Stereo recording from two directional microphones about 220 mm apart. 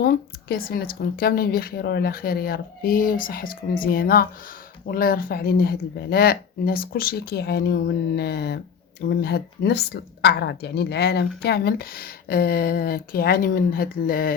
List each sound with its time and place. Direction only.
0.0 s speech: 45° left (ahead or behind)